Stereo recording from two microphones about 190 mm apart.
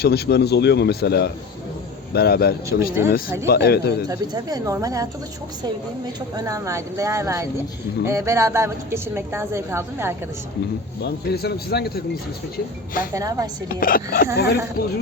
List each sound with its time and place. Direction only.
0.0 s speech: 55° left (ahead or behind)
4.1 s a woman's voice: 20° right (ahead or behind)
6.3 s a woman's voice: 15° right (ahead or behind)
11.0 s speech: 60° left (ahead or behind)
13.1 s a woman's voice: 15° right (ahead or behind)
13.7 s speech: 50° left (ahead or behind)